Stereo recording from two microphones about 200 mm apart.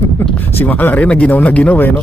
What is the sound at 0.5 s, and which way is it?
Speech, 10° left (ahead or behind).